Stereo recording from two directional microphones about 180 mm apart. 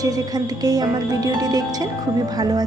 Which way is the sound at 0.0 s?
20° right (ahead or behind).